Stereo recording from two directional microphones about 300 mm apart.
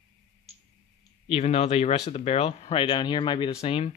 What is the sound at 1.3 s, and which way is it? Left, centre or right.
Speech, left.